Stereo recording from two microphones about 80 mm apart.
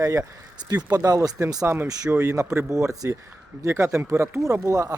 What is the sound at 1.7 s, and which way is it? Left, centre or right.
Speech, right.